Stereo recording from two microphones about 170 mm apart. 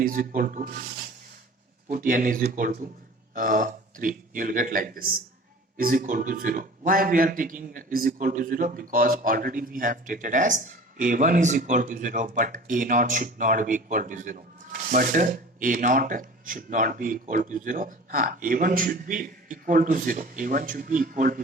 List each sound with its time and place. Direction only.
0.0 s a man's voice: 55° right (ahead or behind)
1.9 s a man's voice: 55° right (ahead or behind)